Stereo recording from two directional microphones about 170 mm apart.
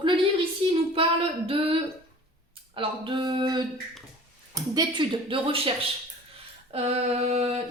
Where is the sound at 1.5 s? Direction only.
35° right (ahead or behind).